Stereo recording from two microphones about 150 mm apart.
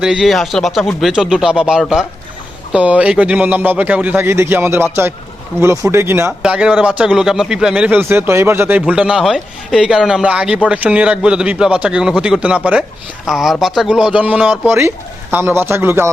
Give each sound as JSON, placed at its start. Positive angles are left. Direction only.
{"t": 0.0, "sound": "a man's voice", "side_deg": -5}